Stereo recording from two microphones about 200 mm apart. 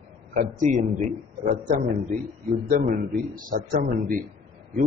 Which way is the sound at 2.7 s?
40° right (ahead or behind).